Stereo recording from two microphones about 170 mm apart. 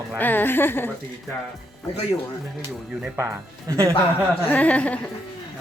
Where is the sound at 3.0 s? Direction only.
15° right (ahead or behind).